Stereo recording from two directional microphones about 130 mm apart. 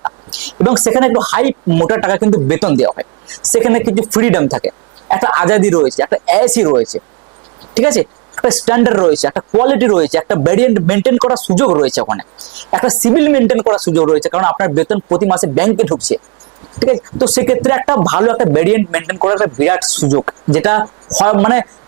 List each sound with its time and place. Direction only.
0.6 s speech: 15° right (ahead or behind)
9.3 s speech: 25° right (ahead or behind)
18.2 s speech: 30° right (ahead or behind)